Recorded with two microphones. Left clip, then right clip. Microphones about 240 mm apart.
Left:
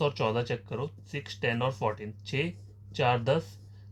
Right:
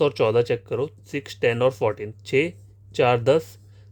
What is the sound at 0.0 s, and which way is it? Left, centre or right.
Speech, right.